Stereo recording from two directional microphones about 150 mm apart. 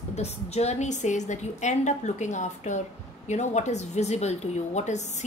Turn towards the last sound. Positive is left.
turn(degrees=50)  # may be behind; listen again after turning